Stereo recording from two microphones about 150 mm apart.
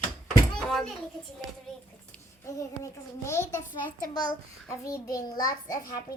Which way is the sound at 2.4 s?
20° left (ahead or behind).